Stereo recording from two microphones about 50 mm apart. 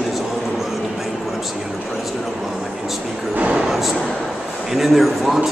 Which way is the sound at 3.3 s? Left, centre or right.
Right.